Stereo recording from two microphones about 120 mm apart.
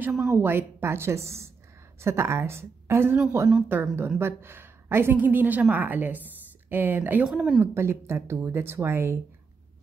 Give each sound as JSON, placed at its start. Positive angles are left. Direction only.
{"t": 0.3, "sound": "a woman's voice", "side_deg": -20}
{"t": 7.6, "sound": "a woman's voice", "side_deg": -20}